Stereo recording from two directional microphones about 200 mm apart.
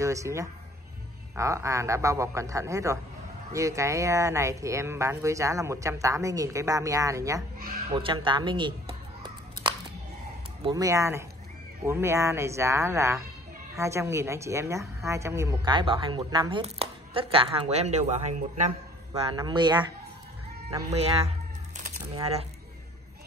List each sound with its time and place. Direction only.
0.0 s speech: 15° right (ahead or behind)
7.9 s a sound: 25° right (ahead or behind)
10.6 s speech: 20° right (ahead or behind); by 18.7 s 35° right (ahead or behind)
19.3 s speech: 20° right (ahead or behind)
22.1 s speech: 30° right (ahead or behind)